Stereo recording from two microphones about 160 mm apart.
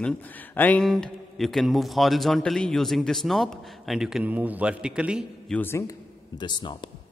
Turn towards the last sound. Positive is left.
turn(degrees=30)  # may be behind; listen again after turning